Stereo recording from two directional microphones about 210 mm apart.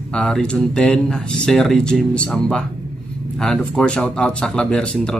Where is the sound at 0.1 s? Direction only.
5° left (ahead or behind).